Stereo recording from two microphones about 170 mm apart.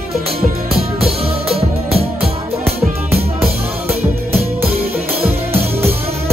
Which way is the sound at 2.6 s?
65° right (ahead or behind).